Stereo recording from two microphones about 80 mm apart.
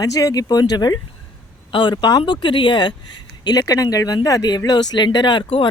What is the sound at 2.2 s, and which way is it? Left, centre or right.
Speech, left.